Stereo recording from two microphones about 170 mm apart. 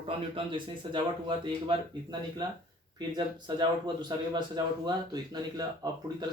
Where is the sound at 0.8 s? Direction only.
30° right (ahead or behind).